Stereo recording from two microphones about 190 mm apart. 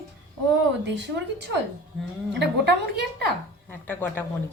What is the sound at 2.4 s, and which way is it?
Speech, 60° right (ahead or behind).